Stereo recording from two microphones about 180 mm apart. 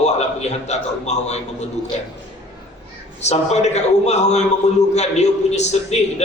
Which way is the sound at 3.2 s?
40° left (ahead or behind).